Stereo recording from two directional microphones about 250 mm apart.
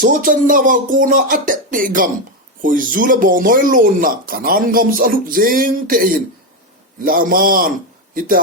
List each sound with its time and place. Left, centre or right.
0.0 s speech: right